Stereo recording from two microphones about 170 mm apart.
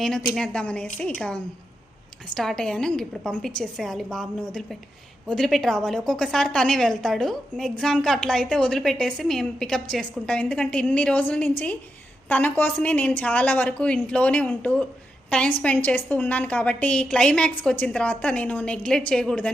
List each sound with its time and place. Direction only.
0.3 s a woman's voice: 5° left (ahead or behind)
2.3 s a woman's voice: 5° left (ahead or behind)